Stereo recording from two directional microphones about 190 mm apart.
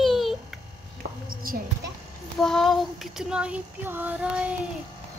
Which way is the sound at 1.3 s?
50° right (ahead or behind).